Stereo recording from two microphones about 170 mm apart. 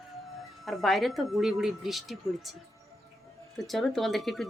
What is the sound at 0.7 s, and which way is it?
Speech, centre (ahead or behind).